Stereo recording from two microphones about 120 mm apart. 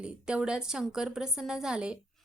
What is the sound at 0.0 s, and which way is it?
A woman's voice, 10° right (ahead or behind).